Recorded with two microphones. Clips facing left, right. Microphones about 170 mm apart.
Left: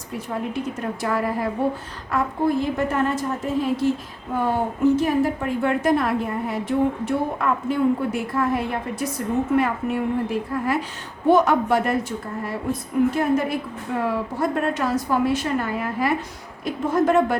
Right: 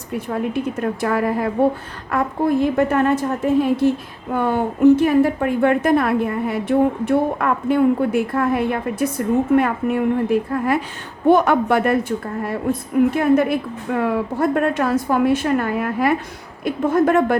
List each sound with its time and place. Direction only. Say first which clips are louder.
0.5 s a woman's voice: right 5 dB; 60° right (ahead or behind)